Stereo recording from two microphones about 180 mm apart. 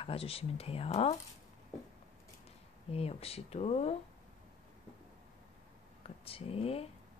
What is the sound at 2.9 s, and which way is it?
Speech, 35° left (ahead or behind).